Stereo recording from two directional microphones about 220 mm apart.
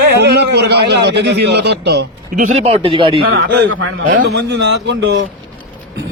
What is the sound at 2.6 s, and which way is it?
Speech, 25° right (ahead or behind).